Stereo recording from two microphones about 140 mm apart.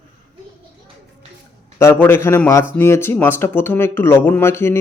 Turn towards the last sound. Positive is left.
turn(degrees=15)  # may be behind; listen again after turning